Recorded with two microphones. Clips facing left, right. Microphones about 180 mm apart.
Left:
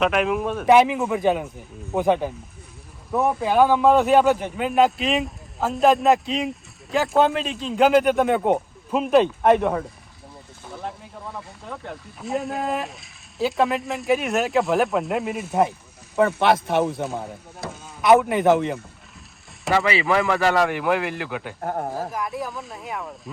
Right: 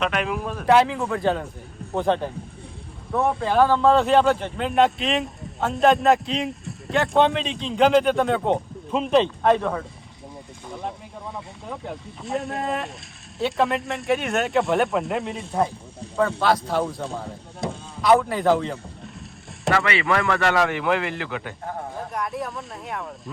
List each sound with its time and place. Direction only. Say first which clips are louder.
0.0 s a man's voice: left 4 dB; 5° left (ahead or behind)
0.7 s a man's voice: left 2 dB; 15° left (ahead or behind)
9.4 s speech: left 2 dB; 15° left (ahead or behind)
10.7 s a man's voice: right 1 dB; centre (ahead or behind)
16.4 s speech: left 2 dB; 25° left (ahead or behind)
18.3 s speech: left 2 dB; 20° left (ahead or behind)
19.8 s a man's voice: left 2 dB; centre (ahead or behind)